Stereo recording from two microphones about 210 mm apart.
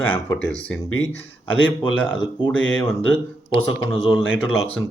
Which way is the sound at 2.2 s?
65° left (ahead or behind).